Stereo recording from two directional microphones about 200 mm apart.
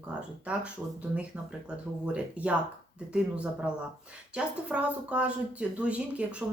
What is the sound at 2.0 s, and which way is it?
A woman's voice, 5° right (ahead or behind).